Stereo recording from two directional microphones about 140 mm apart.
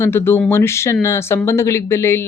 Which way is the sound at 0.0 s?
15° left (ahead or behind).